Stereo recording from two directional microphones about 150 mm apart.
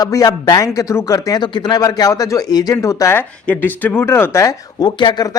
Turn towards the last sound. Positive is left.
turn(degrees=30)  # may be behind; listen again after turning